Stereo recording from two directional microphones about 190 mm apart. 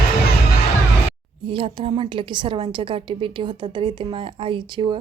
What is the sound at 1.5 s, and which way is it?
A woman's voice, 30° right (ahead or behind).